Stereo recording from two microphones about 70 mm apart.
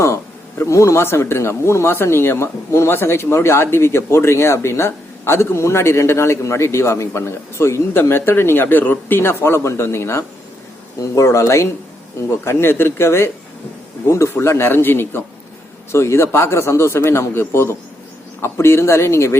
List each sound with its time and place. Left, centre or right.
0.6 s speech: left